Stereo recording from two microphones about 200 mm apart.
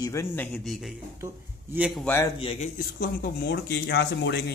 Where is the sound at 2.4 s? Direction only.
30° left (ahead or behind).